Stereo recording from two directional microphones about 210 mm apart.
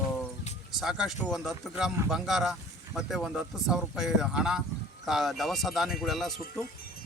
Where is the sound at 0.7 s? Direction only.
Centre (ahead or behind).